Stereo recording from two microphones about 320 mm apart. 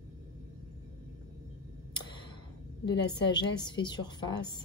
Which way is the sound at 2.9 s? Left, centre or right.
Centre.